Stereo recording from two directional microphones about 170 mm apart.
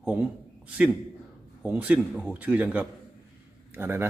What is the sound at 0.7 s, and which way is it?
A man's voice, 10° right (ahead or behind).